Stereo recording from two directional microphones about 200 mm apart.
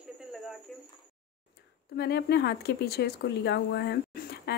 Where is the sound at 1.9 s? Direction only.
55° left (ahead or behind).